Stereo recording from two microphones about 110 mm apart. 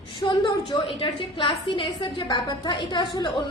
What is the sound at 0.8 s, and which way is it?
A woman's voice, 50° left (ahead or behind).